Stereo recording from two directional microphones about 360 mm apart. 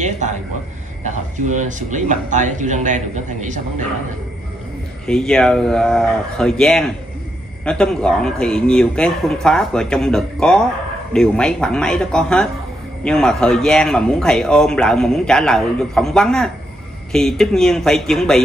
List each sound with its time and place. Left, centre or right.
0.0 s speech: centre
5.0 s speech: centre